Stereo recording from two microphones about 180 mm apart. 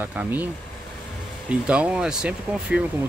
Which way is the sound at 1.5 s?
5° right (ahead or behind).